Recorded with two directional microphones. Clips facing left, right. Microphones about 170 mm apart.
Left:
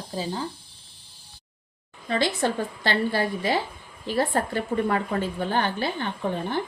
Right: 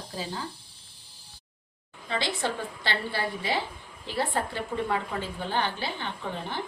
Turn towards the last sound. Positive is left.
turn(degrees=50)  # may be behind; listen again after turning